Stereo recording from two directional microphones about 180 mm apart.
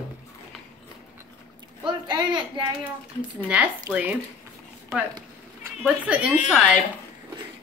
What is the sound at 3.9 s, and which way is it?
Speech, 15° right (ahead or behind).